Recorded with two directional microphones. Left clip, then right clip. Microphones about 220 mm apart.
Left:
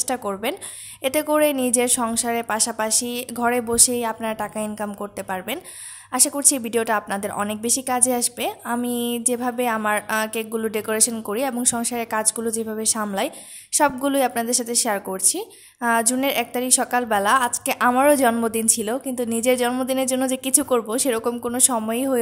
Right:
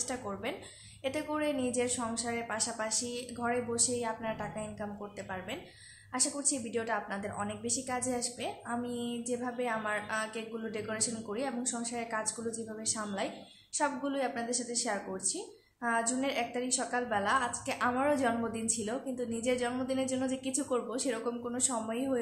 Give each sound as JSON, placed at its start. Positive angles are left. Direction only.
{"t": 0.1, "sound": "a woman's voice", "side_deg": 45}
{"t": 6.1, "sound": "a woman's voice", "side_deg": 50}